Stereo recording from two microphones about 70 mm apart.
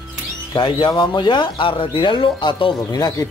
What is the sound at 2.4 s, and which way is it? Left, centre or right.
Speech, left.